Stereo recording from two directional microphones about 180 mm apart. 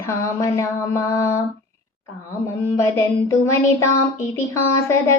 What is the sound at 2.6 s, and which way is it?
A woman's voice, 15° left (ahead or behind).